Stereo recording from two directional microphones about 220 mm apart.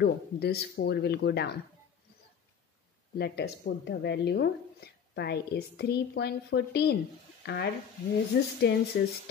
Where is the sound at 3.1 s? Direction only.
50° left (ahead or behind).